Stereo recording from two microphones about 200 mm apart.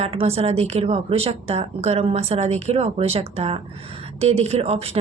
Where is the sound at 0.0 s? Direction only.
30° right (ahead or behind).